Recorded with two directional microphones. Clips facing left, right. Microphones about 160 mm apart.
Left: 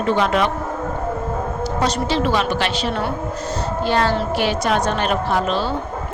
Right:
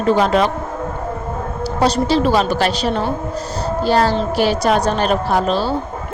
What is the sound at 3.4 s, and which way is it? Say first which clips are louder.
Child singing: right 2 dB; 35° right (ahead or behind).